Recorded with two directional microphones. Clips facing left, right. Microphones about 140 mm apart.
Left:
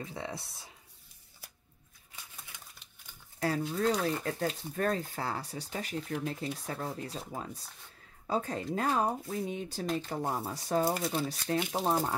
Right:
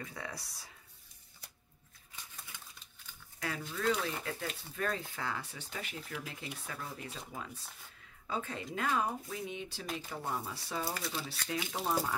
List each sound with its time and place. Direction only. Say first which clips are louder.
0.0 s speech: left 5 dB; 25° left (ahead or behind)
3.3 s speech: left 8 dB; 40° left (ahead or behind)